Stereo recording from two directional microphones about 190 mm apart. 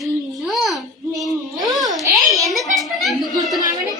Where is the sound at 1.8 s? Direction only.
20° right (ahead or behind).